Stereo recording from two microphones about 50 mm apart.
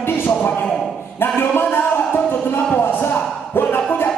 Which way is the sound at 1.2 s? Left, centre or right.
Left.